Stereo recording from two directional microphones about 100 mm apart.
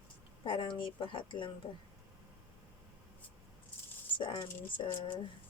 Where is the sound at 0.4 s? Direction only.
55° left (ahead or behind).